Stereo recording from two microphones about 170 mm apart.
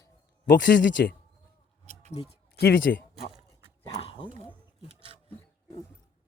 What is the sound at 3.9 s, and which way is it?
Dog, 35° left (ahead or behind).